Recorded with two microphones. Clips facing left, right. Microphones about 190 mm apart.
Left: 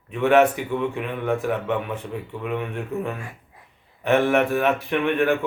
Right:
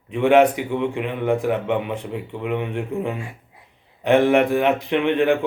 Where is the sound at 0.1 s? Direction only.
15° right (ahead or behind).